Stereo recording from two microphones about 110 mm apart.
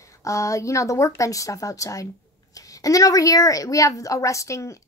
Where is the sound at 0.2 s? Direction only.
30° left (ahead or behind).